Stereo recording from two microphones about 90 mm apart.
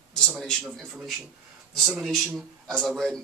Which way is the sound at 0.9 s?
5° right (ahead or behind).